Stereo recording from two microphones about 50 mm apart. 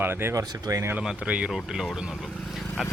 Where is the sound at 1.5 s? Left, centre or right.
Centre.